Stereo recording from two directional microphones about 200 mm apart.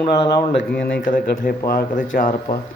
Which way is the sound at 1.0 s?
45° left (ahead or behind).